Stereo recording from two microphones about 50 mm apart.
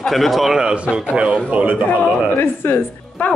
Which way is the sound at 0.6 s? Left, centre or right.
Centre.